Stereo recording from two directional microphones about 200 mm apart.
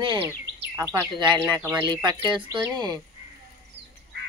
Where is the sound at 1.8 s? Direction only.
20° right (ahead or behind).